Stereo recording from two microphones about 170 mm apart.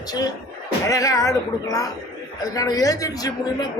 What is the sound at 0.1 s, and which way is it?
A woman's voice, 25° left (ahead or behind).